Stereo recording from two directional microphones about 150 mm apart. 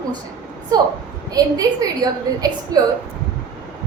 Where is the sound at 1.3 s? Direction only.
25° right (ahead or behind).